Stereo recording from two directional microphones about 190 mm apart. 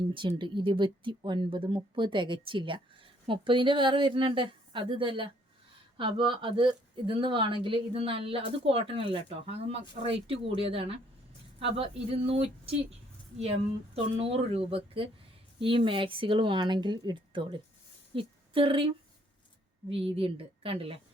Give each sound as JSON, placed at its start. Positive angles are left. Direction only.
{"t": 0.1, "sound": "speech", "side_deg": -25}
{"t": 13.9, "sound": "a woman's voice", "side_deg": -30}
{"t": 19.9, "sound": "speech", "side_deg": -30}